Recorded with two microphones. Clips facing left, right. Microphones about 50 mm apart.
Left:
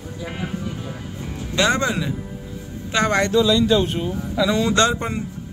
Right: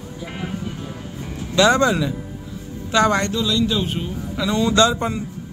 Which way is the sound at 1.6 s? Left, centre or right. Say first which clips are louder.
Right 4 dB; centre.